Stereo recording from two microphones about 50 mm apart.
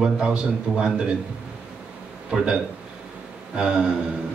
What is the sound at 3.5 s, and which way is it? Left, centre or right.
Speech, centre.